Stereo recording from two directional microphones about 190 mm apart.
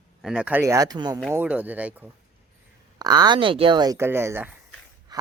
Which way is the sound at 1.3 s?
10° right (ahead or behind).